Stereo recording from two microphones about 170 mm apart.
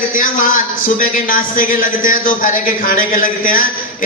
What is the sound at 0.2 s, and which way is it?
A man's voice, 50° left (ahead or behind).